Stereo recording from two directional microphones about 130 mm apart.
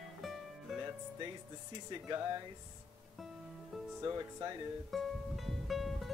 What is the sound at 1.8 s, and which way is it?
Speech, 35° right (ahead or behind).